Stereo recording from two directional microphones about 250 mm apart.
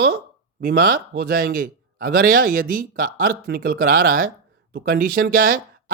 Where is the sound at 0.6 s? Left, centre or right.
Right.